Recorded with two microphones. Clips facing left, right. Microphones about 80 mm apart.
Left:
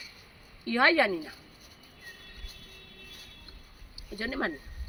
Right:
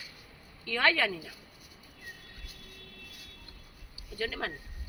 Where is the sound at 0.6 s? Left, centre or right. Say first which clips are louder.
Left 4 dB; left.